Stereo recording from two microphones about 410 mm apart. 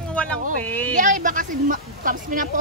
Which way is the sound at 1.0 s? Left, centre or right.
Centre.